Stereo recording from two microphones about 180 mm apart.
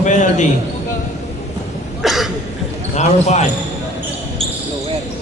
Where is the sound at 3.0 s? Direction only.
40° left (ahead or behind).